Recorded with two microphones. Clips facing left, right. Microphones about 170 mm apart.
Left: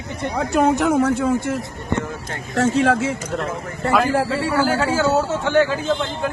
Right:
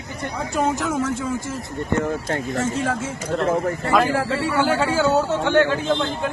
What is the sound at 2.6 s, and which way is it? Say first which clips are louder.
Speech: left 11 dB; 75° left (ahead or behind).